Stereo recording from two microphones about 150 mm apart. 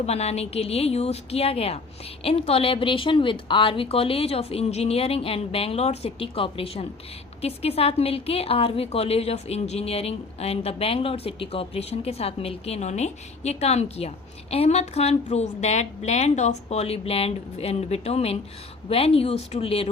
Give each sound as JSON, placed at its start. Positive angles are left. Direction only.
{"t": 0.0, "sound": "a woman's voice", "side_deg": 45}